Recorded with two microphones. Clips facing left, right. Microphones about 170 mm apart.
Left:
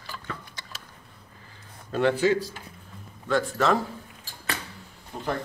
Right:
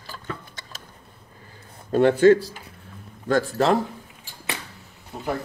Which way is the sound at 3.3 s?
35° right (ahead or behind).